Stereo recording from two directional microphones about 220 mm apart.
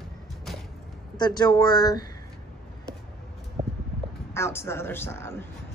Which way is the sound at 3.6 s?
30° right (ahead or behind).